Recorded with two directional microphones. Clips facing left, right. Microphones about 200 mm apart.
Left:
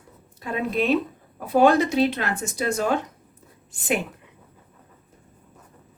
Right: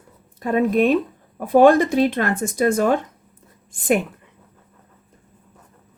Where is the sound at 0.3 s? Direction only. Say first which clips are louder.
Right 7 dB; 50° right (ahead or behind).